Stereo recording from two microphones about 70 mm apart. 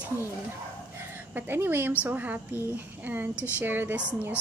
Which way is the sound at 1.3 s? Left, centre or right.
Right.